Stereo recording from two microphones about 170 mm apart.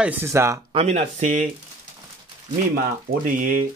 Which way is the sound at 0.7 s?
40° right (ahead or behind).